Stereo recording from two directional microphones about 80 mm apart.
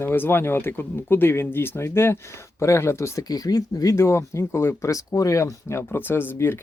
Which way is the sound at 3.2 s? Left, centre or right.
Left.